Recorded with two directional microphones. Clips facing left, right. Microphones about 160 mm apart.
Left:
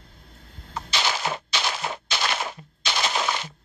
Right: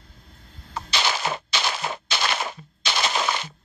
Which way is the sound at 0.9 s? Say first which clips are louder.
Right 1 dB; 70° right (ahead or behind).